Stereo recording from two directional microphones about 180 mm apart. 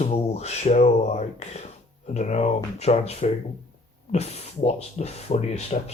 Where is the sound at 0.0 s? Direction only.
35° left (ahead or behind).